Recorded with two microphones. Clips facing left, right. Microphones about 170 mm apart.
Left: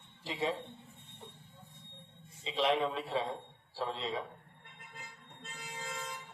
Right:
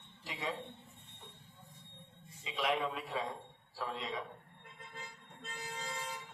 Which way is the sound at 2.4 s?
30° left (ahead or behind).